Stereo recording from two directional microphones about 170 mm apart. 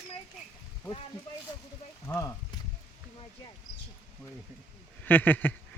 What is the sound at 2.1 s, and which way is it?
Speech, 15° left (ahead or behind).